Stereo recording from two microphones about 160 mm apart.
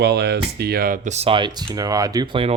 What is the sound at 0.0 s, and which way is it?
Speech, 90° right.